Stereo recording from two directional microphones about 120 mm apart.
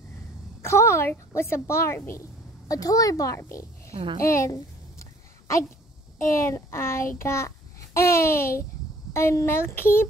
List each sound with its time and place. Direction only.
0.6 s a child's voice: 20° left (ahead or behind)
3.9 s a child's voice: 40° right (ahead or behind)
4.2 s a child's voice: 25° left (ahead or behind)
6.4 s child singing: 20° left (ahead or behind)
9.1 s a child's voice: 20° left (ahead or behind)